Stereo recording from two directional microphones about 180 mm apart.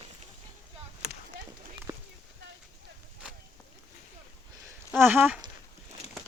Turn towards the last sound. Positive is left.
turn(degrees=-10)  # may be behind; listen again after turning